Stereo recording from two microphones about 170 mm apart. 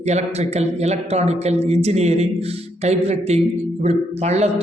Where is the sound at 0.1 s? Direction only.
40° right (ahead or behind).